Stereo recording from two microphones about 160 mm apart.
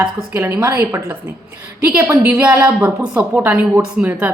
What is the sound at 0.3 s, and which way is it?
A woman's voice, 15° right (ahead or behind).